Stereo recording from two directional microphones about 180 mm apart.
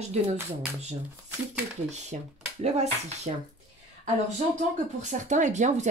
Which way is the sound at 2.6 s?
40° right (ahead or behind).